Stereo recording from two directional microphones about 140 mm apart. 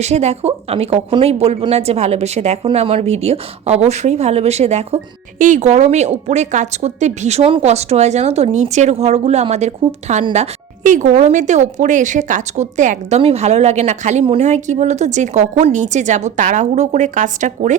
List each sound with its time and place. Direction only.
0.0 s a woman's voice: 50° right (ahead or behind)
5.4 s a woman's voice: 60° right (ahead or behind)